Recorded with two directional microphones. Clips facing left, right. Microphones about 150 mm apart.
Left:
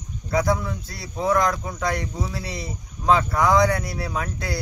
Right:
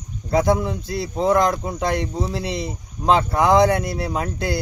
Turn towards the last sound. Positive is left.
turn(degrees=-25)  # may be behind; listen again after turning